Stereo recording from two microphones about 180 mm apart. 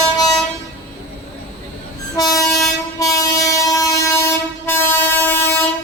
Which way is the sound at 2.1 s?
20° left (ahead or behind).